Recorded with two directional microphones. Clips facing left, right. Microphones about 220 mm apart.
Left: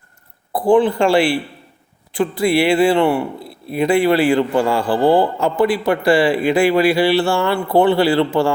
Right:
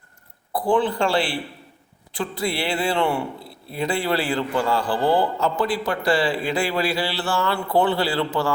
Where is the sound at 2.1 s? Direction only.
55° left (ahead or behind).